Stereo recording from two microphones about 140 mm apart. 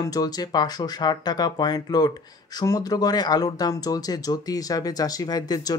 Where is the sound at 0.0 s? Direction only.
25° left (ahead or behind).